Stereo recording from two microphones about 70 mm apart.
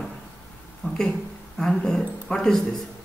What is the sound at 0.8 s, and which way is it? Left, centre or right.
Speech, left.